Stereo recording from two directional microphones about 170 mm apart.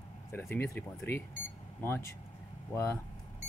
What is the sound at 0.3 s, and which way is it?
Speech, 15° left (ahead or behind).